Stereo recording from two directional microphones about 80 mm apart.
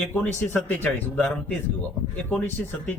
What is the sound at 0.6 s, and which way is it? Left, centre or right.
A man's voice, centre.